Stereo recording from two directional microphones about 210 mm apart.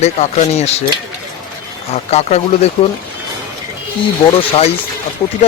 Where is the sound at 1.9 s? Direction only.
30° left (ahead or behind).